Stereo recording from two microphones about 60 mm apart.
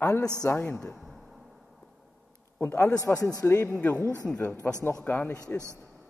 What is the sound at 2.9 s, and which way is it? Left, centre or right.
Speech, left.